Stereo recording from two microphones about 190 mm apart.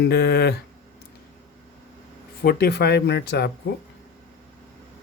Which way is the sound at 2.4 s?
55° left (ahead or behind).